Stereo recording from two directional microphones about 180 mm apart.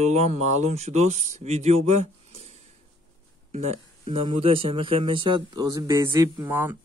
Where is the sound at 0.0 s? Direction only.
40° right (ahead or behind).